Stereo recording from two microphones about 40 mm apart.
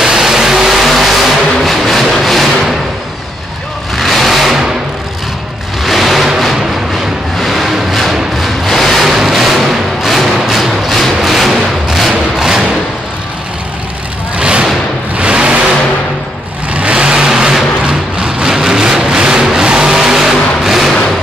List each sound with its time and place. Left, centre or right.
0.0 s vehicle: centre
3.9 s vehicle: centre
5.8 s a sound: centre
6.4 s music: centre
14.3 s vehicle: right
16.7 s vehicle: right; by 17.6 s centre
17.8 s vehicle: right